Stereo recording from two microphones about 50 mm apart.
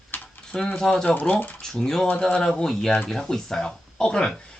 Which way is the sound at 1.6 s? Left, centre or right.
Centre.